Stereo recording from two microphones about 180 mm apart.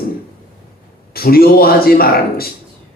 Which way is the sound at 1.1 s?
55° left (ahead or behind).